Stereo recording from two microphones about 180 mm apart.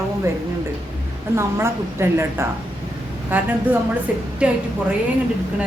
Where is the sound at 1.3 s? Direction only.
15° right (ahead or behind).